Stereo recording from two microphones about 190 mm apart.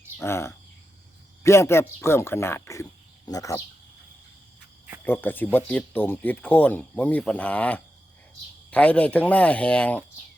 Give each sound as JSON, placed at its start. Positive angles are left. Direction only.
{"t": 0.2, "sound": "speech", "side_deg": 15}
{"t": 5.0, "sound": "speech", "side_deg": 10}